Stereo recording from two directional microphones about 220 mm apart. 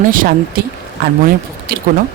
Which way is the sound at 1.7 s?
40° right (ahead or behind).